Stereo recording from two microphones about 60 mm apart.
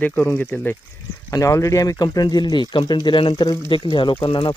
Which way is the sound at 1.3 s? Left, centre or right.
Left.